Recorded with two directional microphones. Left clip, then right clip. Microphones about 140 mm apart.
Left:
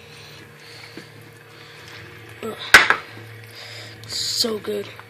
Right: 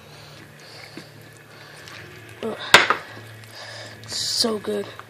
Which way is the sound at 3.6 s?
30° right (ahead or behind).